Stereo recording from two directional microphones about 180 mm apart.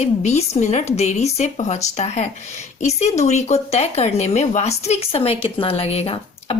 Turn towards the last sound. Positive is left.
turn(degrees=35)  # may be behind; listen again after turning